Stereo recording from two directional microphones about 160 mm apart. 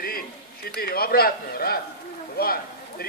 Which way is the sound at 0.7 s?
70° left (ahead or behind).